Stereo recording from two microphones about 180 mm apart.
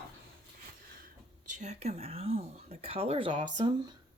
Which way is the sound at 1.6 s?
35° right (ahead or behind).